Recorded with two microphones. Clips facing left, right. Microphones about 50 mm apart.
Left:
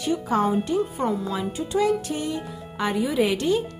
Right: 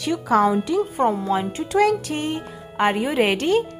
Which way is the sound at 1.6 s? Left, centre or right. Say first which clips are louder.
Right 3 dB; right.